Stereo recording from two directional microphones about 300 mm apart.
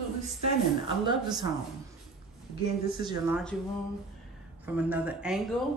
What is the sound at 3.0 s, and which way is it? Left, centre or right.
Speech, centre.